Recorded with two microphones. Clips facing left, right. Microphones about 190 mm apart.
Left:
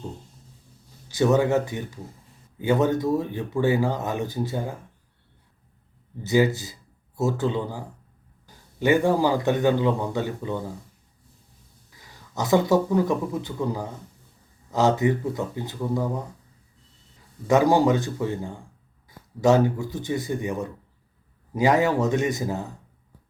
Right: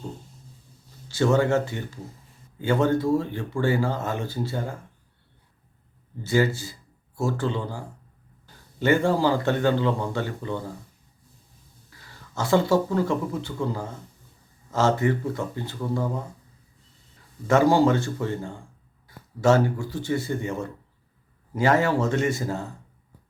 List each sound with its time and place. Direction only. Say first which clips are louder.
1.0 s speech: left 1 dB; 15° left (ahead or behind)
6.2 s speech: left 2 dB; 15° left (ahead or behind)
11.9 s speech: left 1 dB; 15° left (ahead or behind)
17.5 s speech: even; 15° left (ahead or behind)